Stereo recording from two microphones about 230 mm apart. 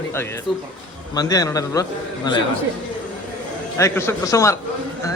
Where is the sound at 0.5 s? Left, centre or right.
Centre.